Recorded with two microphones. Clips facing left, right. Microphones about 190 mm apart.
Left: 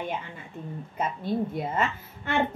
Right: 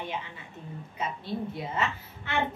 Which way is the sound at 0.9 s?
50° left (ahead or behind).